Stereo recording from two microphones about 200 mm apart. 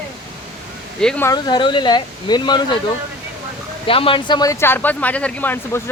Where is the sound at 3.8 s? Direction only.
25° left (ahead or behind); by 5.8 s 10° left (ahead or behind).